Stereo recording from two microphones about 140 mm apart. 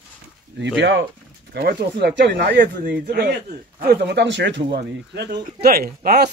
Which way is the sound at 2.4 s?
85° right.